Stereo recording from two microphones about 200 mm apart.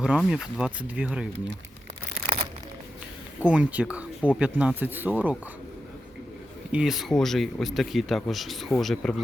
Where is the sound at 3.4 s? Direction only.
5° right (ahead or behind).